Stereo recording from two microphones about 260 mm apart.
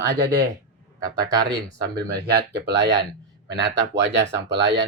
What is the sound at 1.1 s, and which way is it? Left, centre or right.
Speech, centre.